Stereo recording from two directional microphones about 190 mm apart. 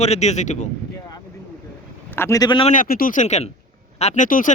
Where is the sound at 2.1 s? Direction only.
15° left (ahead or behind).